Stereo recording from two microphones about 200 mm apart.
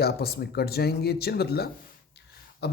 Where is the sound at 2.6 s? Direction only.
55° left (ahead or behind).